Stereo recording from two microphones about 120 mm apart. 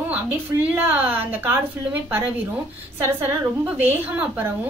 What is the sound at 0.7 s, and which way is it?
A woman's voice, 10° right (ahead or behind).